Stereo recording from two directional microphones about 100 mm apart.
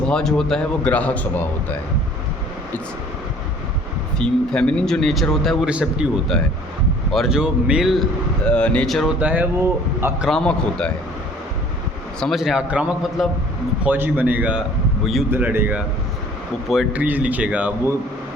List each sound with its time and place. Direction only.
0.0 s speech: 5° left (ahead or behind)
4.2 s speech: 10° left (ahead or behind)
5.6 s speech: 10° right (ahead or behind)
6.3 s speech: 5° left (ahead or behind)
8.4 s speech: 10° left (ahead or behind)
9.1 s speech: 15° right (ahead or behind)
10.2 s speech: 5° left (ahead or behind)
12.2 s a man's voice: centre (ahead or behind); by 15.8 s 15° right (ahead or behind)
16.9 s speech: 15° right (ahead or behind)